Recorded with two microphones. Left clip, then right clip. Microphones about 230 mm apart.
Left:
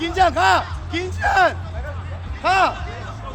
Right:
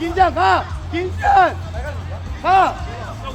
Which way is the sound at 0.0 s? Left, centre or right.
Left.